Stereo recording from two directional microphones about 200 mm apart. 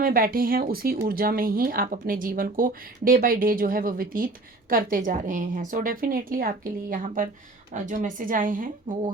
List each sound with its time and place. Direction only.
0.0 s speech: 45° right (ahead or behind)